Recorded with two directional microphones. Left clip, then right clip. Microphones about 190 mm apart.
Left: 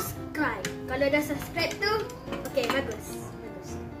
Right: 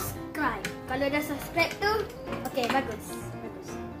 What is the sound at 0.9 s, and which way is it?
A child's voice, 15° right (ahead or behind).